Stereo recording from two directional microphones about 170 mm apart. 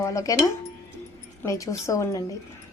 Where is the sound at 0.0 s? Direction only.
20° left (ahead or behind).